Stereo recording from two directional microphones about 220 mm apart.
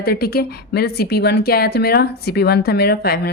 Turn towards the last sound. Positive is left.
turn(degrees=45)  # may be behind; listen again after turning